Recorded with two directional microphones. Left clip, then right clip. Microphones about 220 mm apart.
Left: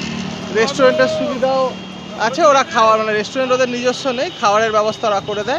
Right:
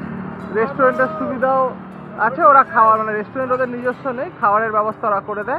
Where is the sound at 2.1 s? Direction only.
5° left (ahead or behind); by 4.8 s 20° left (ahead or behind).